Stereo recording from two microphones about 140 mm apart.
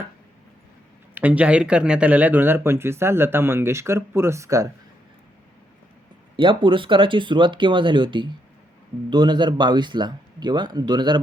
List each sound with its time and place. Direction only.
1.1 s speech: 10° right (ahead or behind)
6.3 s speech: 35° right (ahead or behind)